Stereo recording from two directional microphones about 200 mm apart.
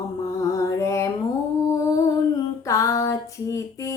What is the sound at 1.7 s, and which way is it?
Music, 15° left (ahead or behind).